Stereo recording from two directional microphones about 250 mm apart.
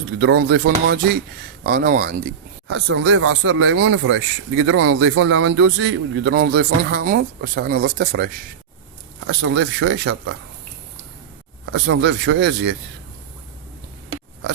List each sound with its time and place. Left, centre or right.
0.2 s speech: right
11.7 s speech: right